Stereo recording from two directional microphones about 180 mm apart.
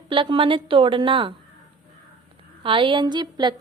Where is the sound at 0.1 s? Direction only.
30° right (ahead or behind).